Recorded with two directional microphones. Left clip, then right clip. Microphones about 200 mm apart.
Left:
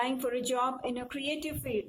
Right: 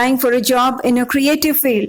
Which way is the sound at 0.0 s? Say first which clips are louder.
Right 17 dB; 45° right (ahead or behind).